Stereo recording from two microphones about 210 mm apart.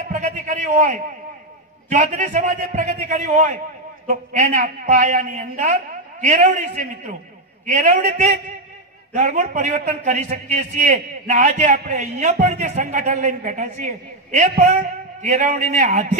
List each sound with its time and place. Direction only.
0.1 s a man's voice: 35° right (ahead or behind)